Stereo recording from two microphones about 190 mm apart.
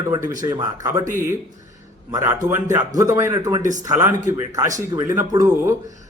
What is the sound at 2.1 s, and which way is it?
A man's voice, 15° right (ahead or behind).